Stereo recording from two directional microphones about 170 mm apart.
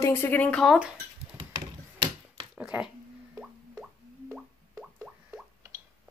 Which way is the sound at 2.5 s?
5° right (ahead or behind).